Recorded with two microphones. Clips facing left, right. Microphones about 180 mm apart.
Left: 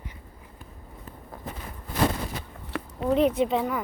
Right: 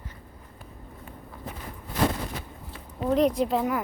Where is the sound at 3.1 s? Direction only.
5° left (ahead or behind).